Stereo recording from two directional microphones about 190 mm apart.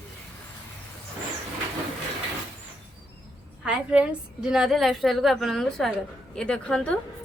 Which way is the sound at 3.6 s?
5° right (ahead or behind).